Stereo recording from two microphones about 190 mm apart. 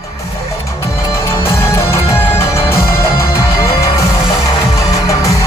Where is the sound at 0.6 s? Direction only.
15° left (ahead or behind).